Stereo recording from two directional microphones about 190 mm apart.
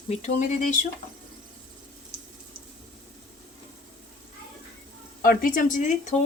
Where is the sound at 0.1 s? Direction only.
35° left (ahead or behind).